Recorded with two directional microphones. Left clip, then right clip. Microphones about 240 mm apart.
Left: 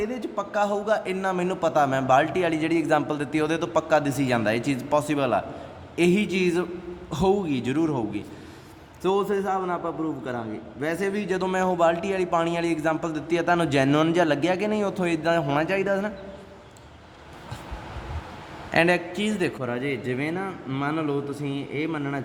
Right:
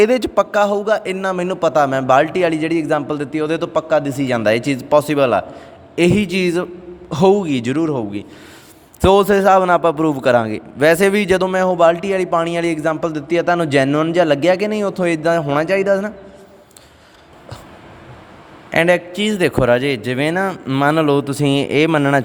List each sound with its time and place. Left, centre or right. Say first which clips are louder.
0.0 s a man's voice: right 16 dB; right
9.0 s a man's voice: right 12 dB; right
11.4 s a man's voice: right 6 dB; right
18.7 s a man's voice: right 7 dB; right